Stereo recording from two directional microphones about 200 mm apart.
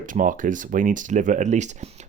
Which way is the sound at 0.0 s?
40° right (ahead or behind).